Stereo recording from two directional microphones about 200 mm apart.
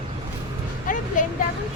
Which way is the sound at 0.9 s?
40° left (ahead or behind).